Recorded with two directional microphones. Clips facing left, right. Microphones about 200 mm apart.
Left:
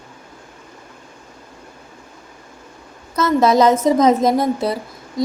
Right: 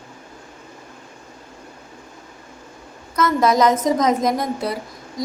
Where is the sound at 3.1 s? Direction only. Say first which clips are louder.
Left 3 dB; 30° left (ahead or behind).